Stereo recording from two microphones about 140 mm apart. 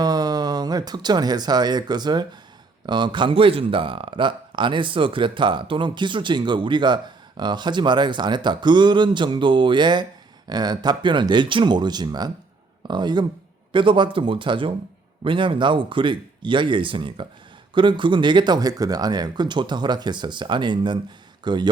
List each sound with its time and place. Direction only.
0.0 s speech: 30° right (ahead or behind)